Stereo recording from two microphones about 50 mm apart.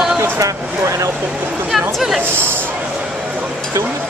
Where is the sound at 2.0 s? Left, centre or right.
Centre.